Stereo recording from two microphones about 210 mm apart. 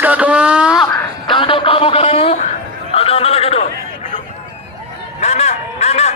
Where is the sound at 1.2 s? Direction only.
25° left (ahead or behind).